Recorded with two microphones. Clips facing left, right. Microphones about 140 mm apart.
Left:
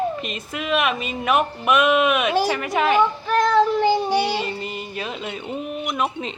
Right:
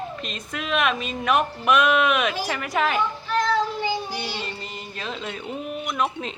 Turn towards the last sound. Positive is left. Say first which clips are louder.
# left 2 dB
turn(degrees=5)  # may be behind; listen again after turning